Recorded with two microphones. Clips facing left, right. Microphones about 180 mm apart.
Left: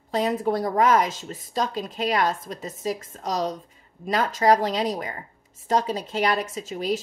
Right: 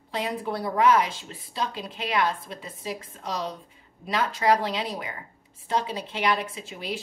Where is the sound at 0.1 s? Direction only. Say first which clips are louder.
Left 6 dB; 45° left (ahead or behind).